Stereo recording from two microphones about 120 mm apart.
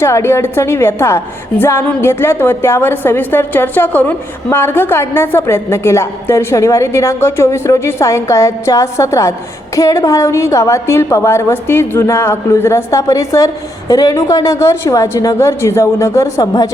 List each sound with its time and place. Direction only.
0.0 s a woman's voice: 20° left (ahead or behind)